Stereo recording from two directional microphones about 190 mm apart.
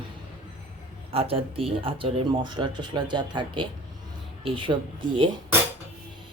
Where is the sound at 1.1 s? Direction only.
30° right (ahead or behind).